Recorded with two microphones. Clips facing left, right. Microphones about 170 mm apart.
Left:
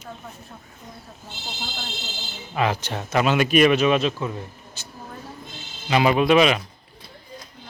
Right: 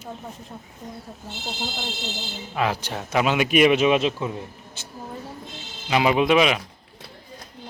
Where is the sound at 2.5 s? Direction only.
5° right (ahead or behind); by 4.9 s 25° right (ahead or behind).